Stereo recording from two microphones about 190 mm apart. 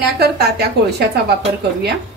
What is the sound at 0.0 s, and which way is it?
A woman's voice, 60° right (ahead or behind).